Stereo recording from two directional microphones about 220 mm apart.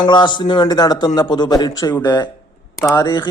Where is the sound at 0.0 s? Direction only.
20° left (ahead or behind).